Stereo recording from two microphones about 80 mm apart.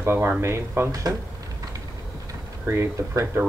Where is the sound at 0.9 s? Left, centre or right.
Right.